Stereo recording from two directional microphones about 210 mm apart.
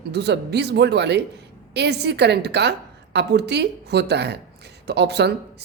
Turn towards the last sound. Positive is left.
turn(degrees=-50)  # may be behind; listen again after turning